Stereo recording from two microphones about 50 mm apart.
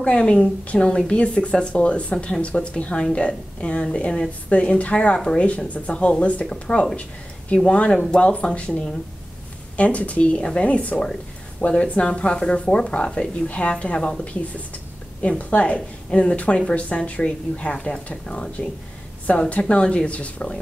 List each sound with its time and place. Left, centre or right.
0.0 s a woman's voice: left
15.2 s a woman's voice: left
19.3 s a woman's voice: left
19.7 s a woman's voice: centre